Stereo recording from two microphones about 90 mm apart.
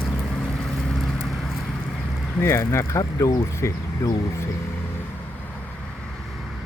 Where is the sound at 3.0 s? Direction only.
45° left (ahead or behind).